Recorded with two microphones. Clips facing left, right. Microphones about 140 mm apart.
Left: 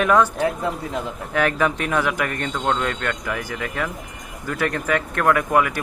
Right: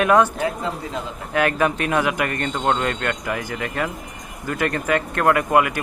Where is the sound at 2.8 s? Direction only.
20° right (ahead or behind).